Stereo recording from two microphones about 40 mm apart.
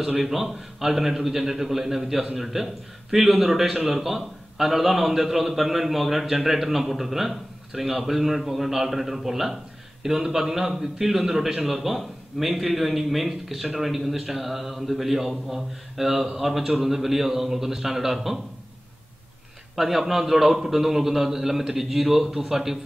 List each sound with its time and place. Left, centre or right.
0.2 s a man's voice: centre
19.7 s a man's voice: centre